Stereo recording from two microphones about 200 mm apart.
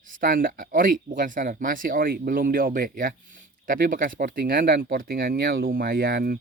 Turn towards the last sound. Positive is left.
turn(degrees=-45)  # may be behind; listen again after turning